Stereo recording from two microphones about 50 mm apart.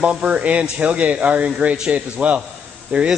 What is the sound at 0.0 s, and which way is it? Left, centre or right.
Speech, right.